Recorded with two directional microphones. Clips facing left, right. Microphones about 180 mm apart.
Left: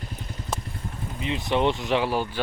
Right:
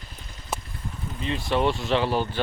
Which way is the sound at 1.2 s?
15° left (ahead or behind).